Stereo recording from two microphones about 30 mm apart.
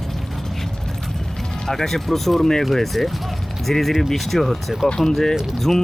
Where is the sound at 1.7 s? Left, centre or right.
Centre.